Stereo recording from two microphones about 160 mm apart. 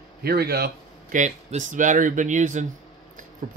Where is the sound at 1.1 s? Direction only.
50° right (ahead or behind).